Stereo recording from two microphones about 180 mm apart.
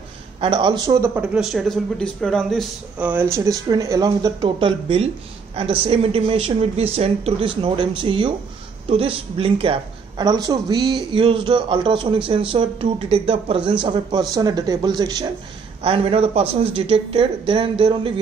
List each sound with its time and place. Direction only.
0.4 s speech: 30° right (ahead or behind); by 3.1 s centre (ahead or behind)
3.1 s speech: 15° right (ahead or behind); by 18.2 s 30° right (ahead or behind)